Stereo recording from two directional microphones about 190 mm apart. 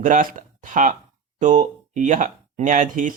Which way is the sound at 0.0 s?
45° right (ahead or behind).